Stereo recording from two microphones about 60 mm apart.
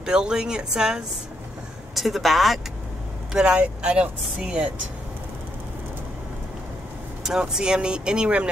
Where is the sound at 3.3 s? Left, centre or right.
Centre.